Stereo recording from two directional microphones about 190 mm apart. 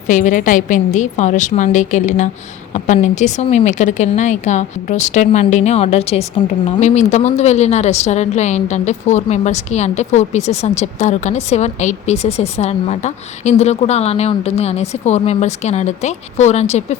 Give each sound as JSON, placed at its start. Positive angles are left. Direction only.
{"t": 0.1, "sound": "a woman's voice", "side_deg": 45}